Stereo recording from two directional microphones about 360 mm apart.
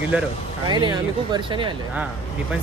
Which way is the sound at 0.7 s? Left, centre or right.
Centre.